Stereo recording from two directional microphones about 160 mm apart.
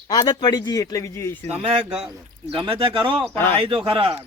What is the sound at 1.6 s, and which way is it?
Speech, 35° right (ahead or behind).